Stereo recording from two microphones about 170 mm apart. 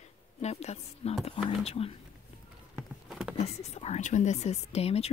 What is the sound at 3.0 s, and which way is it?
Patter, 5° right (ahead or behind).